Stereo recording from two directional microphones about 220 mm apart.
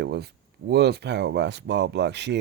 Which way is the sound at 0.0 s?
50° right (ahead or behind).